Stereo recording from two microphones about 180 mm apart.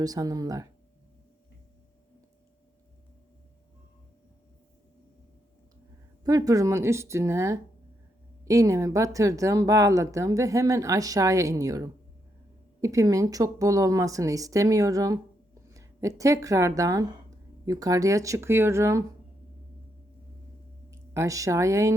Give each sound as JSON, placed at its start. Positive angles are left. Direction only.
{"t": 0.0, "sound": "a woman's voice", "side_deg": -20}
{"t": 6.2, "sound": "a woman's voice", "side_deg": -20}
{"t": 20.9, "sound": "speech", "side_deg": -15}